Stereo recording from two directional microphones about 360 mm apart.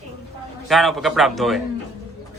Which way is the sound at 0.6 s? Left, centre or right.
Centre.